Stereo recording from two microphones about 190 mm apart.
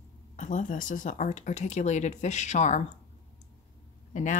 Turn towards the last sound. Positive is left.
turn(degrees=40)  # may be behind; listen again after turning